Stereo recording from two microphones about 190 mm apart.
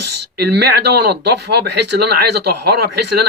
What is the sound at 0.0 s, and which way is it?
Speech, 60° right (ahead or behind).